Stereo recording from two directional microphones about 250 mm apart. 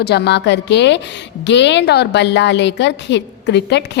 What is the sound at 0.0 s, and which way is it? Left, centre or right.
A woman's voice, left.